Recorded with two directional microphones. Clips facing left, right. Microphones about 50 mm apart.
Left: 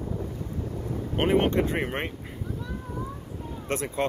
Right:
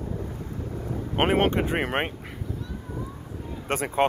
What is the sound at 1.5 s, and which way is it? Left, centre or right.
Speech, right.